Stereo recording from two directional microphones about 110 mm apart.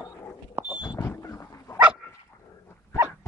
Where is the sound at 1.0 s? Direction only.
25° left (ahead or behind).